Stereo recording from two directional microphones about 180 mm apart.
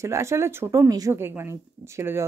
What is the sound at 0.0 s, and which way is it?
Speech, 15° right (ahead or behind).